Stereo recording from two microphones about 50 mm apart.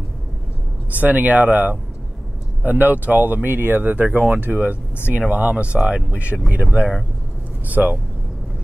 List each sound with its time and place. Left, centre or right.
0.9 s speech: right; by 6.1 s centre
6.5 s speech: right